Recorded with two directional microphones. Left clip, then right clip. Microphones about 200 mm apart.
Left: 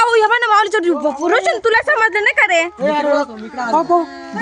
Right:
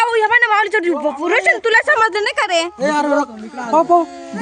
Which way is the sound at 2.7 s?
35° right (ahead or behind).